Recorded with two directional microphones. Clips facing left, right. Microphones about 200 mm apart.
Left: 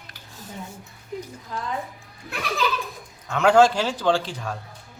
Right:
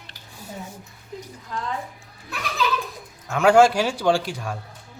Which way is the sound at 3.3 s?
10° right (ahead or behind).